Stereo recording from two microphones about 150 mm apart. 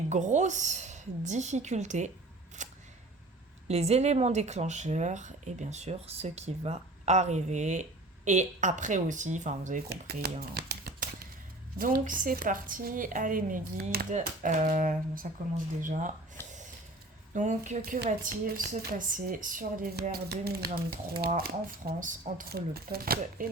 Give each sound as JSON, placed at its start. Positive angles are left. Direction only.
{"t": 0.1, "sound": "speech", "side_deg": -50}
{"t": 2.6, "sound": "single-lens reflex camera", "side_deg": -55}
{"t": 3.7, "sound": "speech", "side_deg": -45}
{"t": 10.5, "sound": "shuffling cards", "side_deg": -90}
{"t": 11.8, "sound": "speech", "side_deg": -70}
{"t": 14.1, "sound": "speech", "side_deg": -55}
{"t": 21.8, "sound": "speech", "side_deg": -70}